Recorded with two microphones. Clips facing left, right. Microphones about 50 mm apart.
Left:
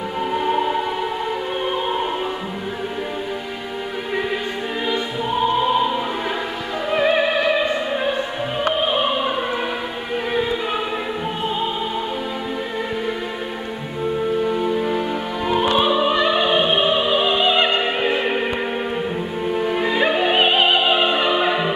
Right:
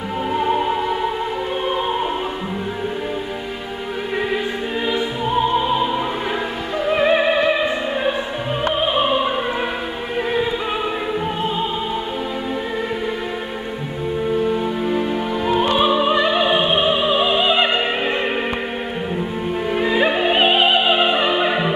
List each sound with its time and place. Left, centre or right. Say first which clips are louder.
0.3 s music: right 1 dB; centre
6.9 s music: right 2 dB; centre
14.4 s music: even; centre
15.8 s opera: right 1 dB; centre
19.5 s opera: right 1 dB; centre